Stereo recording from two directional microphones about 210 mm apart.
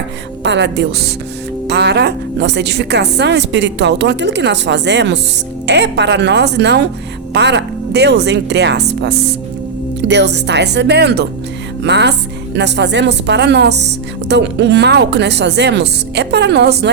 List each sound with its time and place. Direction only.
0.4 s a woman's voice: 55° right (ahead or behind)